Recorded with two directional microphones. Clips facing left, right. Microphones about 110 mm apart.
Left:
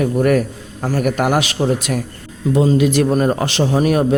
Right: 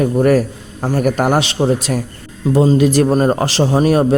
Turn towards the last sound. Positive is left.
turn(degrees=-30)  # may be behind; listen again after turning